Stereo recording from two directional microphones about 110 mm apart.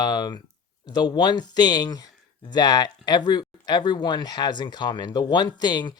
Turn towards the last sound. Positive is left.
turn(degrees=40)  # may be behind; listen again after turning